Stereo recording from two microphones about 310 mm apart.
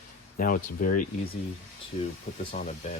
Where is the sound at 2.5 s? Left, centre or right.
Left.